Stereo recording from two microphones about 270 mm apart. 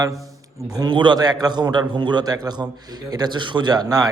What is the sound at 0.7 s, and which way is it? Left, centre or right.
A man's voice, centre.